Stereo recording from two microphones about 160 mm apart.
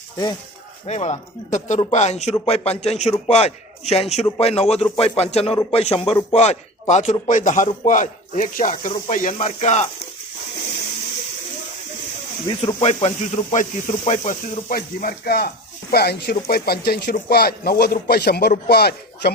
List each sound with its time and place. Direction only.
0.9 s a man's voice: 40° left (ahead or behind)
12.5 s a man's voice: 40° left (ahead or behind); by 15.4 s 70° left (ahead or behind)
15.9 s speech: 80° left